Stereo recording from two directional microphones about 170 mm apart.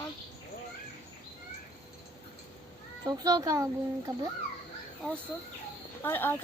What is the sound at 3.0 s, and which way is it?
Speech, 20° right (ahead or behind).